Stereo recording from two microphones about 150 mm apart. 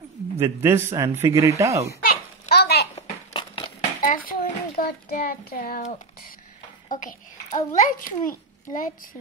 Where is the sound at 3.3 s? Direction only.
30° left (ahead or behind).